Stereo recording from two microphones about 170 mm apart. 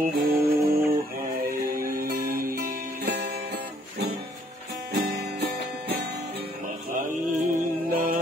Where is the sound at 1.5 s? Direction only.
55° right (ahead or behind).